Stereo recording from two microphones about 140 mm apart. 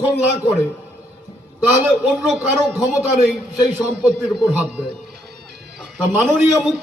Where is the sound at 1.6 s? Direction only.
10° right (ahead or behind).